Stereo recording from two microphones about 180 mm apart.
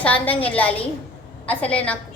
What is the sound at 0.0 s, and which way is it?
A woman's voice, 10° left (ahead or behind).